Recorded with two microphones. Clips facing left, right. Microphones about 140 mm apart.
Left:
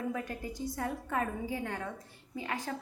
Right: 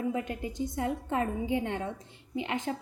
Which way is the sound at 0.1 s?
20° right (ahead or behind).